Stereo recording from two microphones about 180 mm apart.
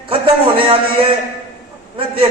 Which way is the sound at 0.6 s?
30° right (ahead or behind).